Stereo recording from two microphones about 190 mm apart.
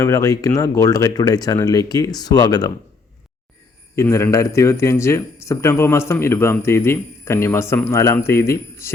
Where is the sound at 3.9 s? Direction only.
15° left (ahead or behind).